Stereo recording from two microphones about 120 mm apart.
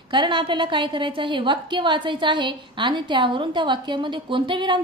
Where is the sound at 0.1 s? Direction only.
40° right (ahead or behind).